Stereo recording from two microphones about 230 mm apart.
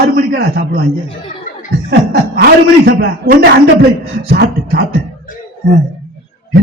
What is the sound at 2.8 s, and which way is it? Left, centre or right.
A man's voice, right.